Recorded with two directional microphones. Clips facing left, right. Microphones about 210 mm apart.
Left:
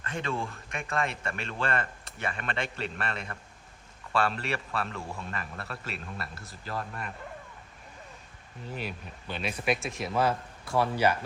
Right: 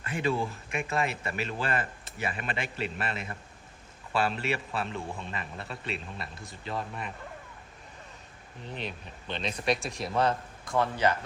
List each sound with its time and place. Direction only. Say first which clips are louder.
0.0 s speech: right 4 dB; 10° right (ahead or behind)
8.6 s speech: left 1 dB; 5° left (ahead or behind)